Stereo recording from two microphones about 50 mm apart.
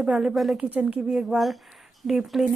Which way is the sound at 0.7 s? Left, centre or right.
Right.